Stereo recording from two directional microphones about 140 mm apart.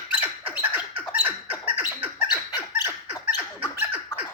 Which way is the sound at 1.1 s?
15° right (ahead or behind).